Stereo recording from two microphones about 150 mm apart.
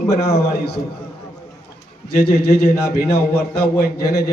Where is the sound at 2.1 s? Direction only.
90° left.